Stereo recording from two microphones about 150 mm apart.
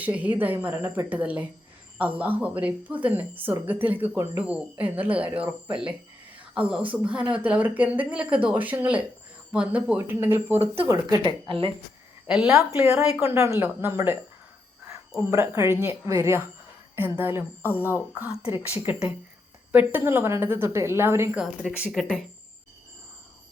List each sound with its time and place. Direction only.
0.0 s a woman's voice: 10° right (ahead or behind)
11.3 s speech: 35° right (ahead or behind)
12.3 s a woman's voice: 5° right (ahead or behind)
12.7 s a woman's voice: 15° right (ahead or behind)
15.2 s a woman's voice: 20° right (ahead or behind)
17.7 s speech: 15° left (ahead or behind)
17.9 s a woman's voice: 10° right (ahead or behind)
18.3 s speech: 40° left (ahead or behind)
18.9 s a woman's voice: 5° right (ahead or behind)